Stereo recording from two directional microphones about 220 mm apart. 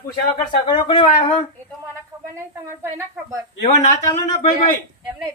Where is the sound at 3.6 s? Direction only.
30° left (ahead or behind).